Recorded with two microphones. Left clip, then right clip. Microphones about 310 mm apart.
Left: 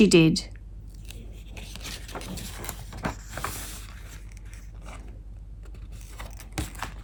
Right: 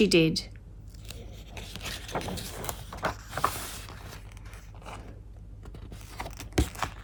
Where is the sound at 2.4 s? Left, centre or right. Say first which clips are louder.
Right 1 dB; centre.